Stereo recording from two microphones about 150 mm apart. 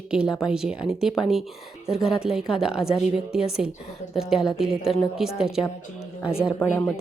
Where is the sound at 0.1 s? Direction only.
5° right (ahead or behind).